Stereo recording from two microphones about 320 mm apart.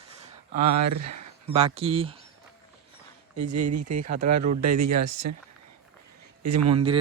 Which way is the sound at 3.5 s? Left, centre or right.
Right.